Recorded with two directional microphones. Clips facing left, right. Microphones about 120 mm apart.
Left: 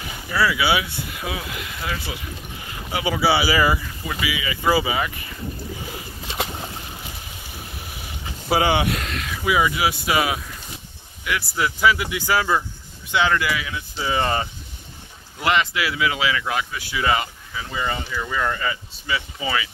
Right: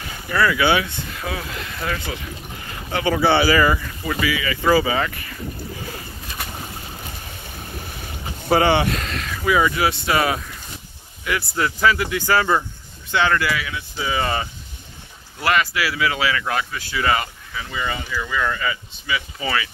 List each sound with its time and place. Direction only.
0.3 s speech: 10° left (ahead or behind)
8.5 s speech: 10° left (ahead or behind); by 19.2 s 30° left (ahead or behind)
19.4 s speech: 15° left (ahead or behind)